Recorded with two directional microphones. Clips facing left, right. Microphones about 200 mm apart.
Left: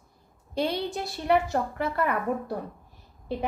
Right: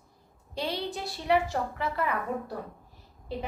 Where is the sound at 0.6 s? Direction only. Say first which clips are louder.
Left 5 dB; 60° left (ahead or behind).